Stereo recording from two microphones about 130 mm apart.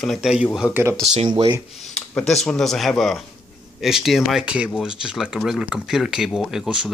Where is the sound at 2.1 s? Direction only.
5° left (ahead or behind).